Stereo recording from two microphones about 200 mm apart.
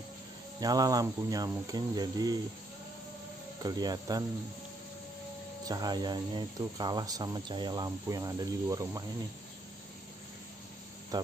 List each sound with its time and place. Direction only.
0.6 s speech: 20° right (ahead or behind)
3.6 s speech: 20° right (ahead or behind)
5.7 s speech: 20° right (ahead or behind)